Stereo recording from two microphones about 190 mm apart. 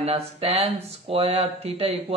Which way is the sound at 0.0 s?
30° right (ahead or behind).